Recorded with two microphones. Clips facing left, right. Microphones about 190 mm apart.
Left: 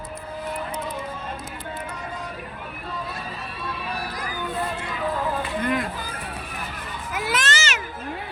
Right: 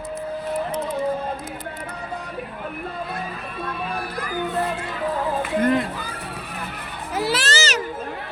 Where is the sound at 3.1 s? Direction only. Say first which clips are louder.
Right 3 dB; 55° right (ahead or behind).